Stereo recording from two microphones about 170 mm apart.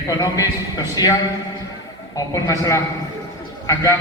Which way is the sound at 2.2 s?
20° left (ahead or behind).